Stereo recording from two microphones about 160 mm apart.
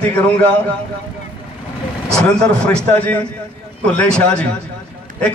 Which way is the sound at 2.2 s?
5° left (ahead or behind).